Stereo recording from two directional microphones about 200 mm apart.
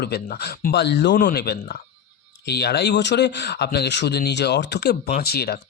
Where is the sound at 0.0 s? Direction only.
55° left (ahead or behind).